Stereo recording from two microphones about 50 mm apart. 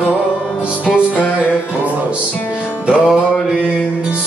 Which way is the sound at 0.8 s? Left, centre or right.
Right.